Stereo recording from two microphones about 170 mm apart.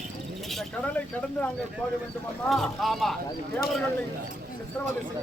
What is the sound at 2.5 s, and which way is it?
Speech, centre (ahead or behind).